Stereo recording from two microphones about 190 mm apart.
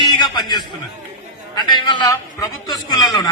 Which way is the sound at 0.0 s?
20° left (ahead or behind).